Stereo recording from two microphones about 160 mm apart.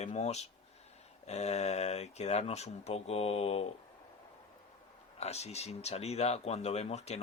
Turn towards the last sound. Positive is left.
turn(degrees=45)  # may be behind; listen again after turning